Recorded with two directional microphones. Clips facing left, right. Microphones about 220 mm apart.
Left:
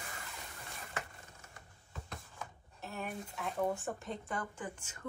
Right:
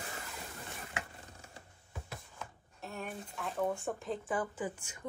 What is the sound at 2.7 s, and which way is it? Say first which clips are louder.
Speech: even; centre (ahead or behind).